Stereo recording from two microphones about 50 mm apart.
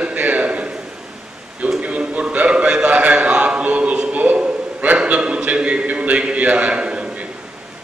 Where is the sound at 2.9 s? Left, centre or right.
Right.